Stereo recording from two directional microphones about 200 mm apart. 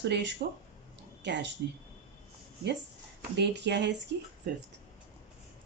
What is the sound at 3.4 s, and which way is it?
Speech, 60° right (ahead or behind).